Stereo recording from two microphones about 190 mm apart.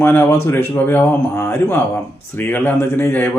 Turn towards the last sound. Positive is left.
turn(degrees=10)  # may be behind; listen again after turning